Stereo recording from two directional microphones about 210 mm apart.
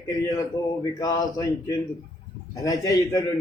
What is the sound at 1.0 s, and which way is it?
Speech, 20° left (ahead or behind).